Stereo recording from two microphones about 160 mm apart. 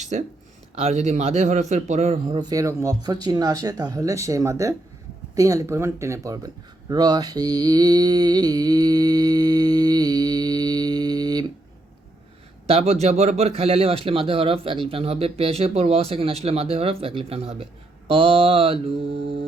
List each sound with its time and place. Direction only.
0.0 s a man's voice: 45° right (ahead or behind); by 4.7 s 20° right (ahead or behind)
5.3 s a sound: 20° right (ahead or behind)
12.6 s speech: 40° right (ahead or behind)